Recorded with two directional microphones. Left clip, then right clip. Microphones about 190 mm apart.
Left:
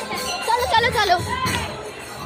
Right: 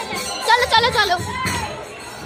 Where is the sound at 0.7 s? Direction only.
10° right (ahead or behind).